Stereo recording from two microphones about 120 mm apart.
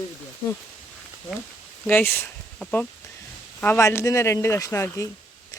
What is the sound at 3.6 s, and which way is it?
Speech, 20° left (ahead or behind).